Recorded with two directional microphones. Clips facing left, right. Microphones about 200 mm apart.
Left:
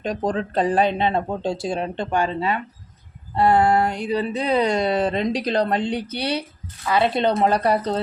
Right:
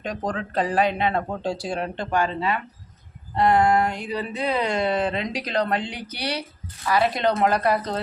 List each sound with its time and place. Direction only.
0.0 s speech: 30° left (ahead or behind)
3.3 s a sound: 30° left (ahead or behind)
6.8 s speech: 25° left (ahead or behind)